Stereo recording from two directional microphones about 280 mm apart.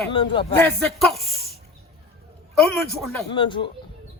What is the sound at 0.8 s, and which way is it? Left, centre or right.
Speech, centre.